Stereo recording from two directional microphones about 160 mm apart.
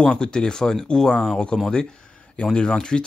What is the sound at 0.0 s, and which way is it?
Speech, 5° left (ahead or behind).